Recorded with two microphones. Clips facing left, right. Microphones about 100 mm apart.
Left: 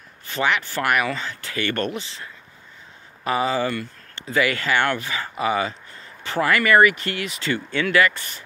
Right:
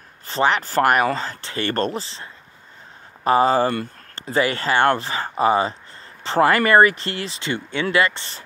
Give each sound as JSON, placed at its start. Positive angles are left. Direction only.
{"t": 0.3, "sound": "speech", "side_deg": -35}
{"t": 3.3, "sound": "speech", "side_deg": -40}